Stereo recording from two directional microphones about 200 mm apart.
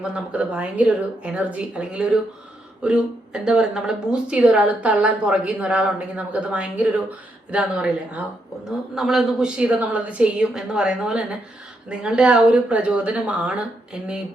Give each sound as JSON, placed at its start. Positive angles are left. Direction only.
{"t": 0.0, "sound": "a woman's voice", "side_deg": -5}